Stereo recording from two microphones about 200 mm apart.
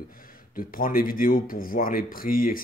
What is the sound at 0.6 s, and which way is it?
Speech, 45° left (ahead or behind).